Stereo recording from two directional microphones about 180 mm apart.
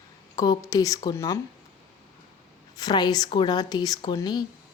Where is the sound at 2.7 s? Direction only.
20° left (ahead or behind).